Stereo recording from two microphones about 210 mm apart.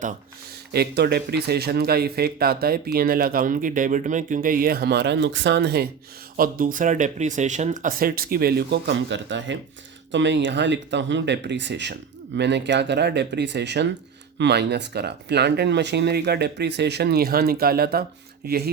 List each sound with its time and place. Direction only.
0.7 s speech: 50° right (ahead or behind)
6.3 s speech: 40° right (ahead or behind)